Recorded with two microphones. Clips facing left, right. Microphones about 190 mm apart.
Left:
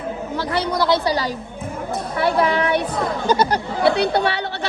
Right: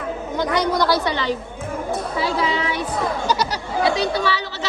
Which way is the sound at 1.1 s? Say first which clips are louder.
Even; 40° left (ahead or behind).